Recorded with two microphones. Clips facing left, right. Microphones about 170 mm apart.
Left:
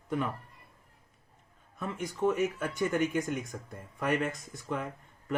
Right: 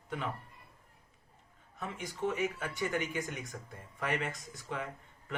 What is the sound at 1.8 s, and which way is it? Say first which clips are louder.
Speech: left 6 dB; 50° left (ahead or behind).